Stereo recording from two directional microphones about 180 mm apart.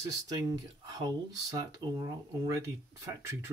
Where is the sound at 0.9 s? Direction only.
20° right (ahead or behind).